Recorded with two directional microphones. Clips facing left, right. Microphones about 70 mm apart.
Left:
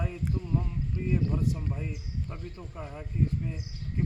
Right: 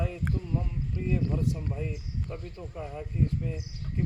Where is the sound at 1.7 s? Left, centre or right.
Centre.